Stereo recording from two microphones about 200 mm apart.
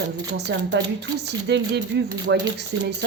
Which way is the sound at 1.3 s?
60° right (ahead or behind).